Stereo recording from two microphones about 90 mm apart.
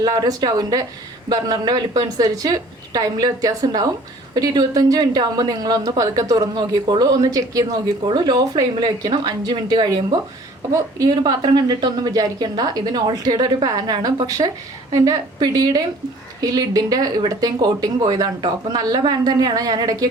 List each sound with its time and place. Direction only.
0.0 s speech: 45° right (ahead or behind)
7.0 s speech: 45° right (ahead or behind)